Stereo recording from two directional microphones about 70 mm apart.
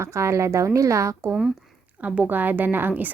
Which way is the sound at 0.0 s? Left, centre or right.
Right.